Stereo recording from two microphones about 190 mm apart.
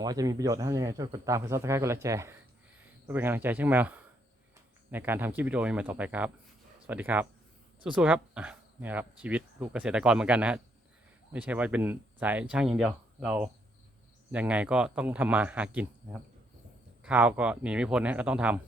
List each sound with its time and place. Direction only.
0.0 s speech: 20° right (ahead or behind)